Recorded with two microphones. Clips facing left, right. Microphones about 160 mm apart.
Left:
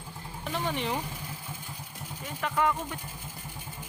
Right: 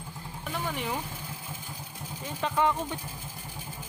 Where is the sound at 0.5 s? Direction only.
5° right (ahead or behind).